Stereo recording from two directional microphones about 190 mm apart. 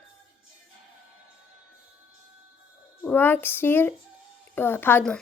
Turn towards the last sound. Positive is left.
turn(degrees=10)  # may be behind; listen again after turning